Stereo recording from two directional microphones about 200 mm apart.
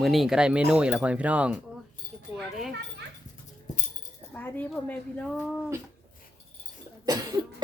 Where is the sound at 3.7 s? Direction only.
35° left (ahead or behind).